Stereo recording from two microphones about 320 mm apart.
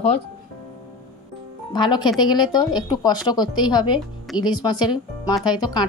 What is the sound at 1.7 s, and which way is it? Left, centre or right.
A woman's voice, centre.